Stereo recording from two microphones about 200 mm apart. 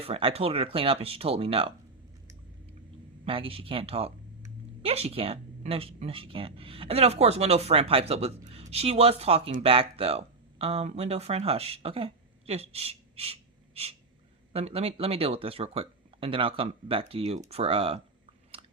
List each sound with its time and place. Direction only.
0.0 s speech: 30° right (ahead or behind)
3.2 s speech: 25° right (ahead or behind)